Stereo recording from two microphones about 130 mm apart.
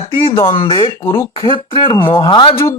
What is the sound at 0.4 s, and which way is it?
Speech, 40° left (ahead or behind).